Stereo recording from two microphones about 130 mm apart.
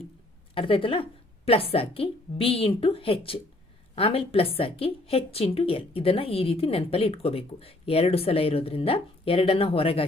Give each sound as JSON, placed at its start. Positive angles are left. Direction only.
{"t": 0.5, "sound": "a woman's voice", "side_deg": 45}